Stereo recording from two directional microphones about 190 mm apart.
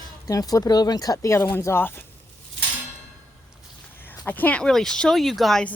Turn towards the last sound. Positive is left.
turn(degrees=5)  # may be behind; listen again after turning